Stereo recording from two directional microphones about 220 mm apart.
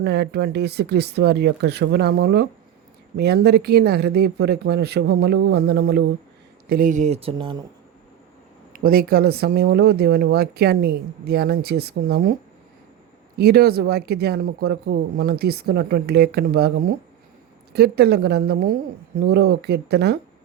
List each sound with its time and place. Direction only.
0.0 s speech: 50° right (ahead or behind)
6.7 s speech: 40° right (ahead or behind); by 7.5 s 25° right (ahead or behind)
8.7 s speech: 40° right (ahead or behind)
13.3 s speech: 45° right (ahead or behind)